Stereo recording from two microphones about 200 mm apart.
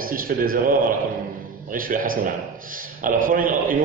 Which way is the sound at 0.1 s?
45° right (ahead or behind).